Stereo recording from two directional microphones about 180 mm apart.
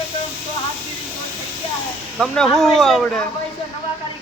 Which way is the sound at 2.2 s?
Centre (ahead or behind).